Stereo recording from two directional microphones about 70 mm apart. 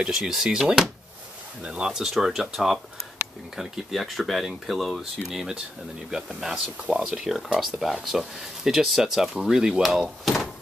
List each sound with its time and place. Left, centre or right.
0.0 s speech: centre